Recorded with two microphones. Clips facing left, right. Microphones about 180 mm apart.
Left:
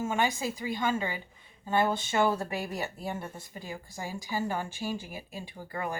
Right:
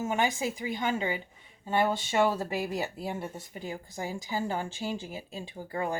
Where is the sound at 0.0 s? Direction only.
15° right (ahead or behind).